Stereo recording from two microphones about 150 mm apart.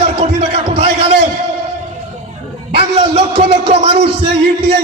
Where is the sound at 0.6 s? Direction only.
45° right (ahead or behind).